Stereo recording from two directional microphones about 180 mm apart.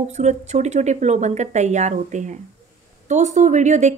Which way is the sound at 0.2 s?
40° right (ahead or behind).